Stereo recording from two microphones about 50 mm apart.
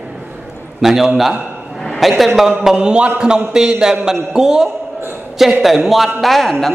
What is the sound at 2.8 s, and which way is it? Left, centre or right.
A man's voice, right.